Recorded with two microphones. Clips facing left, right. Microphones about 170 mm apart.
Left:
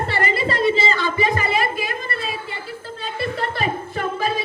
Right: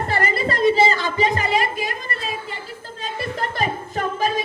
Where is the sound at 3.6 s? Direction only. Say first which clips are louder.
Even; 40° right (ahead or behind).